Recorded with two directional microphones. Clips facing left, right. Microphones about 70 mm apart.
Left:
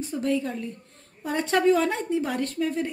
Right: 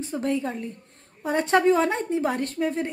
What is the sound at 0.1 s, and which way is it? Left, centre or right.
A woman's voice, right.